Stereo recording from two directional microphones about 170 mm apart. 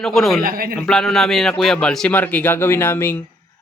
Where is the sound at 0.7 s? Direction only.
5° left (ahead or behind).